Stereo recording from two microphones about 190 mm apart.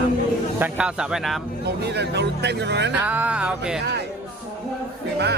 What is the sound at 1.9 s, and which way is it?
A man's voice, 60° right (ahead or behind).